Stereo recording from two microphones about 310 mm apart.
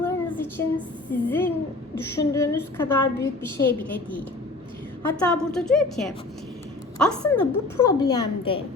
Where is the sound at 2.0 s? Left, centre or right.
Centre.